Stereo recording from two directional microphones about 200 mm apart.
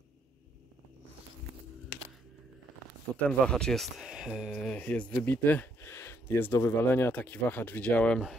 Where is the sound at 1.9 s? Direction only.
55° left (ahead or behind).